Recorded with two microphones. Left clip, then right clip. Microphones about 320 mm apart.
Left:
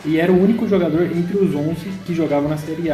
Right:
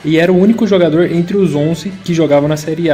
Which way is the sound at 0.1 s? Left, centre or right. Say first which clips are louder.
Right 5 dB; right.